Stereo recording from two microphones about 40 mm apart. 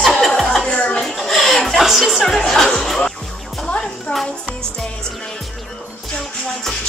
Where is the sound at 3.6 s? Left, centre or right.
Left.